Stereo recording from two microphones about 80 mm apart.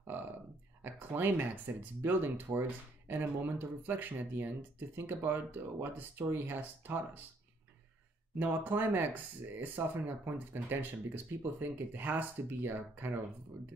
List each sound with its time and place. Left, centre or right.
0.8 s speech: right
8.4 s speech: right